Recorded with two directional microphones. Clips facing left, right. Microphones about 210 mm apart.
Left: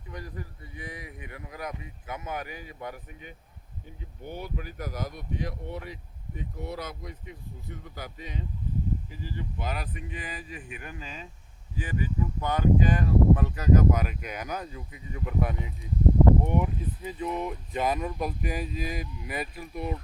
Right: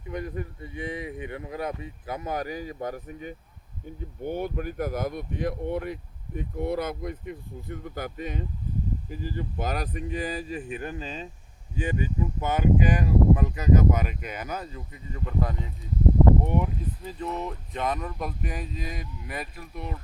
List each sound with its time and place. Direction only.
0.1 s speech: 20° right (ahead or behind); by 19.9 s centre (ahead or behind)